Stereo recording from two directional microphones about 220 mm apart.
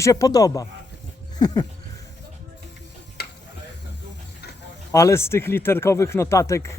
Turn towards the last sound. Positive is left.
turn(degrees=15)  # may be behind; listen again after turning